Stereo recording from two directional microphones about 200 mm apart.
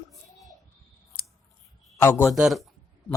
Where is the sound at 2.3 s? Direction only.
Centre (ahead or behind).